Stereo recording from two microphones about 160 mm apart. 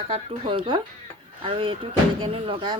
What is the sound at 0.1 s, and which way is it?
Speech, 35° right (ahead or behind).